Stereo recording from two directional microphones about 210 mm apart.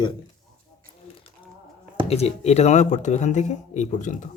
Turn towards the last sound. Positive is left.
turn(degrees=35)  # may be behind; listen again after turning